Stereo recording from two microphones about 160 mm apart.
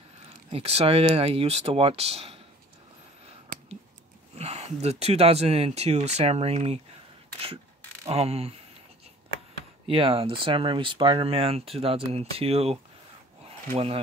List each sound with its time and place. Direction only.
0.5 s speech: 40° right (ahead or behind)
4.4 s speech: 40° right (ahead or behind)
8.1 s speech: 40° right (ahead or behind)
9.8 s speech: 35° right (ahead or behind)
13.5 s a sound: 40° right (ahead or behind)